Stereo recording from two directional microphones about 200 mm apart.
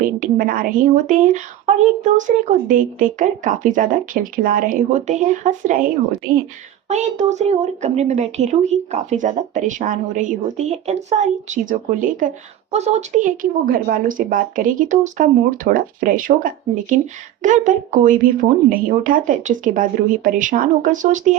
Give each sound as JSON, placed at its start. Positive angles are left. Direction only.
{"t": 0.0, "sound": "a woman's voice", "side_deg": -45}
{"t": 6.8, "sound": "a woman's voice", "side_deg": -35}